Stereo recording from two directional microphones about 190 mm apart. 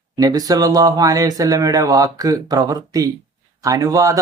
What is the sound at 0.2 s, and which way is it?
Speech, 20° right (ahead or behind).